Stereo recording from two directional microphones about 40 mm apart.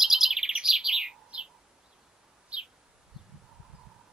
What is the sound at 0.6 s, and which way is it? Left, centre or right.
Bird, centre.